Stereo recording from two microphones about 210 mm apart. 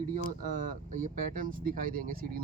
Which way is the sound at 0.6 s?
40° right (ahead or behind).